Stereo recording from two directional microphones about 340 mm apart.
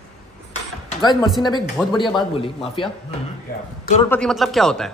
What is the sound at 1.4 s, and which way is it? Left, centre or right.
A man's voice, centre.